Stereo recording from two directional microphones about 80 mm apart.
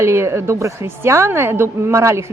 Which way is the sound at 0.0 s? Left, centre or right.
Right.